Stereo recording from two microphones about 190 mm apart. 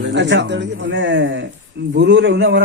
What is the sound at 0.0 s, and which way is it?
A man's voice, 70° right (ahead or behind).